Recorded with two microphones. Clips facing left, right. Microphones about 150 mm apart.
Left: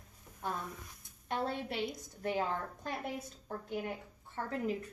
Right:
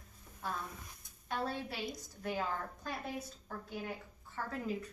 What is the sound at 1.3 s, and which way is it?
A woman's voice, 20° left (ahead or behind).